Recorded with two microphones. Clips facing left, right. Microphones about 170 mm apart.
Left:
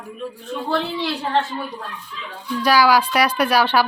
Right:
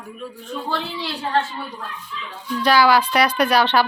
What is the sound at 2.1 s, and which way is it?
Speech, 40° left (ahead or behind).